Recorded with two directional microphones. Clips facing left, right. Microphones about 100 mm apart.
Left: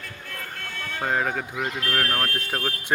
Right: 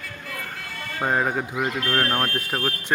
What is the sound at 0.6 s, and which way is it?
Speech, 5° right (ahead or behind).